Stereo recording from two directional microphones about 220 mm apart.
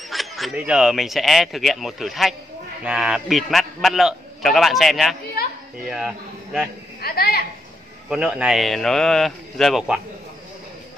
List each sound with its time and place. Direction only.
0.1 s a man's voice: centre (ahead or behind)
7.0 s a sound: 45° left (ahead or behind)
8.1 s a man's voice: 5° right (ahead or behind)